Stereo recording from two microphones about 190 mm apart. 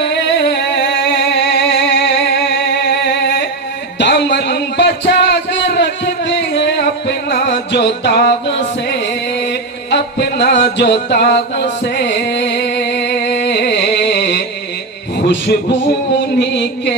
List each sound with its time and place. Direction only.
0.0 s music: 65° left (ahead or behind)
4.0 s a sound: 65° left (ahead or behind)
15.2 s music: 65° left (ahead or behind)